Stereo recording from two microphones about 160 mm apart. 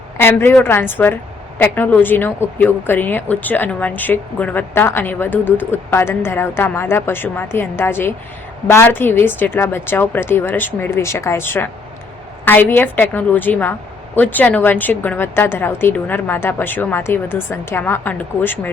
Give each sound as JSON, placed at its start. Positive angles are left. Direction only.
{"t": 0.2, "sound": "a woman's voice", "side_deg": 15}